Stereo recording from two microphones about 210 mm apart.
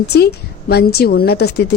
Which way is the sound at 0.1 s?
50° left (ahead or behind).